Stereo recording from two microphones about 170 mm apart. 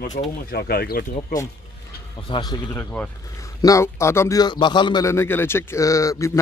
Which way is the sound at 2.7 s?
10° left (ahead or behind).